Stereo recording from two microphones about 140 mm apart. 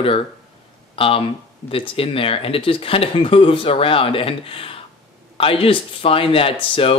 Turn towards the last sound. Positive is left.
turn(degrees=40)  # may be behind; listen again after turning